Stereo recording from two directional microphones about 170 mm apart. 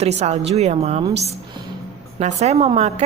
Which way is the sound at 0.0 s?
40° right (ahead or behind).